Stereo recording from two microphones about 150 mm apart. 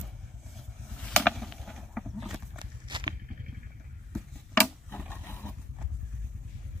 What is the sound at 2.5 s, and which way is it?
Walk, 30° right (ahead or behind).